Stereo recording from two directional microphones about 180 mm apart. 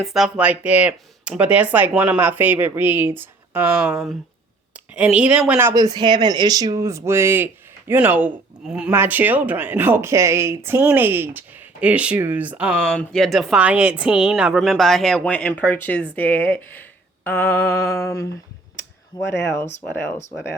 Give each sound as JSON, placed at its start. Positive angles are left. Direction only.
{"t": 0.0, "sound": "speech", "side_deg": 0}
{"t": 4.9, "sound": "speech", "side_deg": -5}
{"t": 17.2, "sound": "a sound", "side_deg": 10}
{"t": 19.2, "sound": "speech", "side_deg": 75}